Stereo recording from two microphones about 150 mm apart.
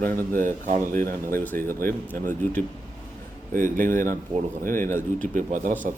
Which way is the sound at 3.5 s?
65° right (ahead or behind).